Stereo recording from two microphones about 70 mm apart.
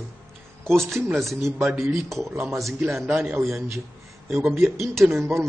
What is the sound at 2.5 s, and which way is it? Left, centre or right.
Speech, centre.